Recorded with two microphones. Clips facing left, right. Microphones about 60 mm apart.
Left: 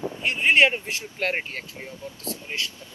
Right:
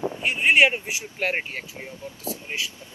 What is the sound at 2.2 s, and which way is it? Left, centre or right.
Speech, centre.